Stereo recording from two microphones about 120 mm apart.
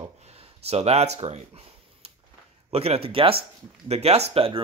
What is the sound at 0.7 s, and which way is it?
Speech, 60° right (ahead or behind).